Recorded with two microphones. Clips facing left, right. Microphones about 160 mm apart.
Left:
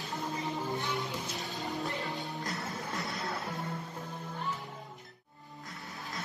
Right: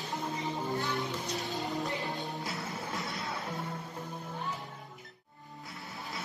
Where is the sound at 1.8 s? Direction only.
Centre (ahead or behind).